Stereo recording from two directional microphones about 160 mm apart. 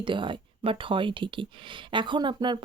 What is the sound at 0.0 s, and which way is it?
Speech, 30° right (ahead or behind).